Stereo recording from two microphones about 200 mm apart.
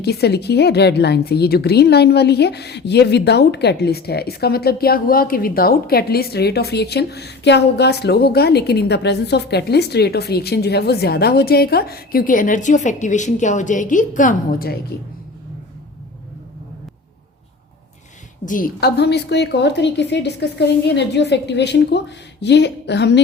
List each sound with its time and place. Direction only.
0.0 s a woman's voice: 55° left (ahead or behind)
18.4 s a woman's voice: 45° left (ahead or behind); by 23.2 s 60° left (ahead or behind)